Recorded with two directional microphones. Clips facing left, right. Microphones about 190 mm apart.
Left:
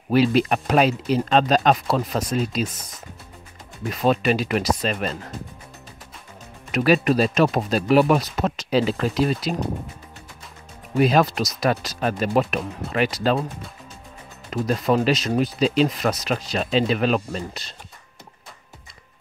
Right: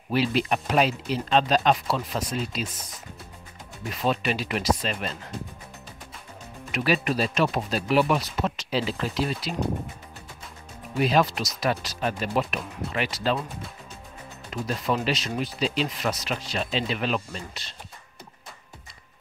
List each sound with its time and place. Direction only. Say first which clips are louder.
0.1 s speech: left 6 dB; 45° left (ahead or behind)
4.0 s speech: left 6 dB; 45° left (ahead or behind)
6.7 s speech: left 7 dB; 45° left (ahead or behind)
11.0 s speech: left 4 dB; 45° left (ahead or behind)
14.5 s speech: left 7 dB; 45° left (ahead or behind)